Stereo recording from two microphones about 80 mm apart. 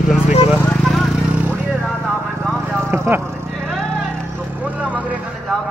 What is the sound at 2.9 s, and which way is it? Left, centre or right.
Speech, right.